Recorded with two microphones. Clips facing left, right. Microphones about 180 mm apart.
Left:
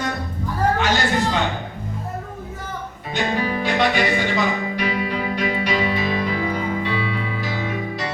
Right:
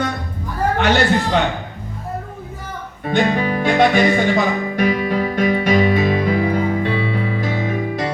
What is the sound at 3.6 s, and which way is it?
Music, 50° right (ahead or behind).